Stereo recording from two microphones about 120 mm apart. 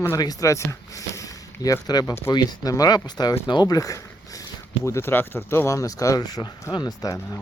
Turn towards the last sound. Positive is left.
turn(degrees=30)  # may be behind; listen again after turning